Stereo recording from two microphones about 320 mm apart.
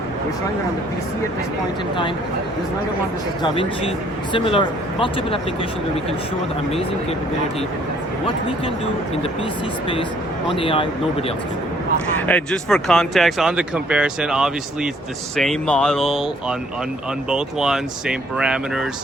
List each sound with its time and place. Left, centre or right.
3.4 s speech: centre
10.6 s speech: centre
12.2 s speech: centre